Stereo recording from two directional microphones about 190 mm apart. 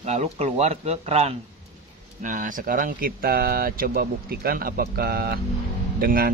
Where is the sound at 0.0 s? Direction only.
35° right (ahead or behind).